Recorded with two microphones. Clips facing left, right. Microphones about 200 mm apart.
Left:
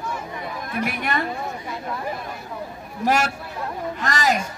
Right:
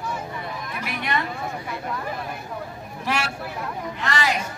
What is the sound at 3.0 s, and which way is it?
Speech, 45° left (ahead or behind).